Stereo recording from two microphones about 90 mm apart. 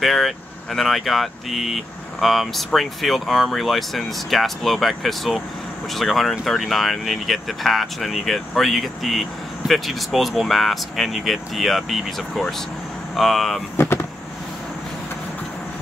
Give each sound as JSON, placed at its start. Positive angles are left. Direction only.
{"t": 0.0, "sound": "speech", "side_deg": 0}
{"t": 13.8, "sound": "vehicle", "side_deg": 25}